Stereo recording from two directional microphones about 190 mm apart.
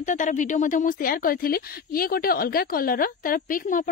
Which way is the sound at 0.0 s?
40° left (ahead or behind).